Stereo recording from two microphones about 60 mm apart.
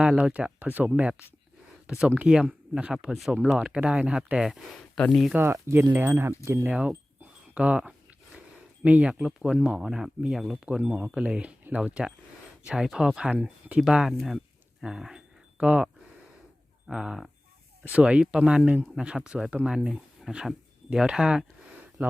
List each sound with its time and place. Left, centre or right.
0.0 s speech: centre
0.3 s speech: right
2.0 s speech: centre
3.4 s speech: centre
5.4 s speech: right
6.7 s speech: centre
10.7 s speech: centre
12.6 s speech: centre
13.3 s speech: right
14.3 s a sound: centre
15.5 s speech: centre
17.9 s speech: centre